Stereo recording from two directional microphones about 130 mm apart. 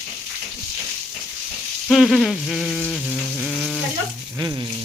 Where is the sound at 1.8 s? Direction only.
Centre (ahead or behind).